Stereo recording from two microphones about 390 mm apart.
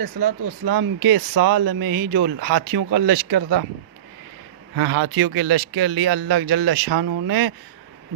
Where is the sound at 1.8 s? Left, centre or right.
Right.